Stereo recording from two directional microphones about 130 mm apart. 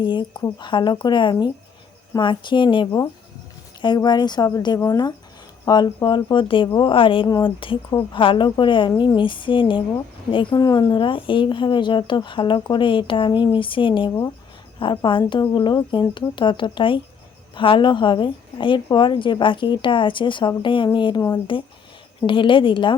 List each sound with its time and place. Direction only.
0.0 s speech: 35° left (ahead or behind)
7.3 s a woman's voice: 30° left (ahead or behind)